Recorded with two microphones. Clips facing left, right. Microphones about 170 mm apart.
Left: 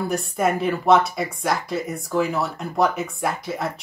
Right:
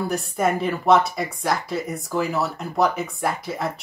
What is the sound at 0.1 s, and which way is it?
Speech, centre (ahead or behind).